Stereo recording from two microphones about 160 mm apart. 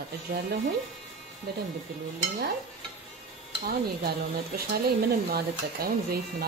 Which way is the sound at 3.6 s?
70° right (ahead or behind).